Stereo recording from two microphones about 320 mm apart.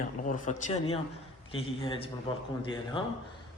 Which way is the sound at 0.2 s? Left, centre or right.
Left.